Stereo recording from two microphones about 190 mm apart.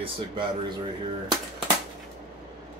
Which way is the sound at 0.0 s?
25° right (ahead or behind).